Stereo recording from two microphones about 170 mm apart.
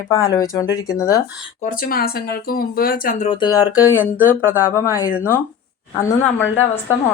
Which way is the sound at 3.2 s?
25° left (ahead or behind).